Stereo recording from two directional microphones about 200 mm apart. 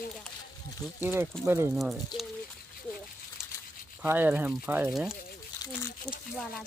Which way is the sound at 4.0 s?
10° right (ahead or behind).